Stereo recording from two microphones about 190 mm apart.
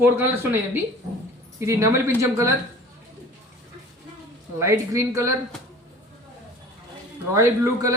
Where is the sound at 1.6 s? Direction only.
15° right (ahead or behind).